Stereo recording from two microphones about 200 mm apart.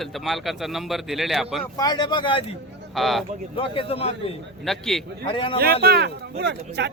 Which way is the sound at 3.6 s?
25° left (ahead or behind).